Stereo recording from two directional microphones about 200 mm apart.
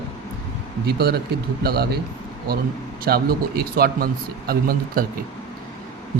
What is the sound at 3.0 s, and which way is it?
Speech, 50° right (ahead or behind).